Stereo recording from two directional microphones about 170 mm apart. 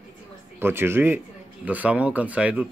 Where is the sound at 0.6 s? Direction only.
15° right (ahead or behind).